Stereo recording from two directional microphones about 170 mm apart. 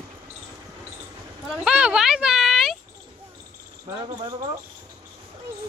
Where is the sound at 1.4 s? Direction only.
5° right (ahead or behind).